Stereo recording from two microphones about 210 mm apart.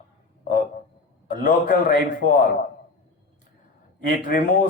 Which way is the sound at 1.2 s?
40° left (ahead or behind).